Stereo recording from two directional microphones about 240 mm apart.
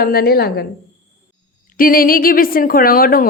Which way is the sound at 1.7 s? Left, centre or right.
Left.